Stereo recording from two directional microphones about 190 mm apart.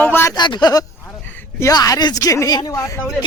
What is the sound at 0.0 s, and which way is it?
Speech, 10° left (ahead or behind).